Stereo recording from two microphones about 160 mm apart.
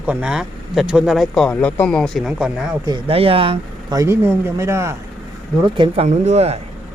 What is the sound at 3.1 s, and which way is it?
Speech, 35° right (ahead or behind).